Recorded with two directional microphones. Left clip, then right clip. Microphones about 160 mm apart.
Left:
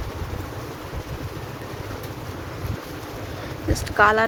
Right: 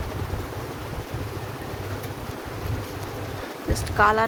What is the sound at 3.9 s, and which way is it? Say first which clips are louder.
Speech: left 2 dB; 20° left (ahead or behind).